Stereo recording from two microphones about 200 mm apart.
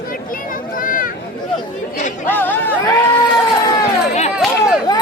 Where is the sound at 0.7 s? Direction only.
45° left (ahead or behind).